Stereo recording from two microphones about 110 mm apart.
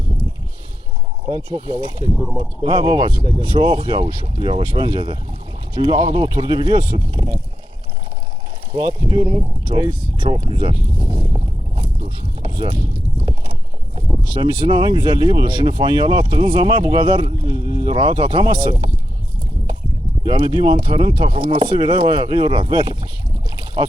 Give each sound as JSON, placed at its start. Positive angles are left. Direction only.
{"t": 1.3, "sound": "speech", "side_deg": -40}
{"t": 8.7, "sound": "speech", "side_deg": -40}
{"t": 10.9, "sound": "boat", "side_deg": -45}
{"t": 14.4, "sound": "speech", "side_deg": -45}
{"t": 20.2, "sound": "speech", "side_deg": -40}